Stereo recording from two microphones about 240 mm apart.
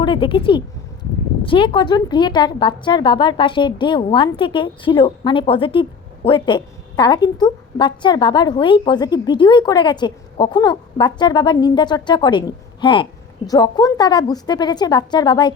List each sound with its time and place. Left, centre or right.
0.0 s a woman's voice: left